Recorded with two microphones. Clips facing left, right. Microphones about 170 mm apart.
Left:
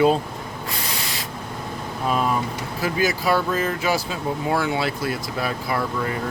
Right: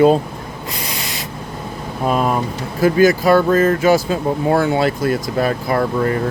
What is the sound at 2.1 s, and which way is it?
Speech, 50° right (ahead or behind).